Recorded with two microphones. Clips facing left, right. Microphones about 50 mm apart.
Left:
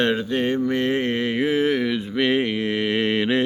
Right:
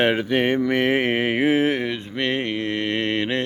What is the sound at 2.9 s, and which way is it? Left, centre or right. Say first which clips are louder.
Mantra: left 4 dB; centre.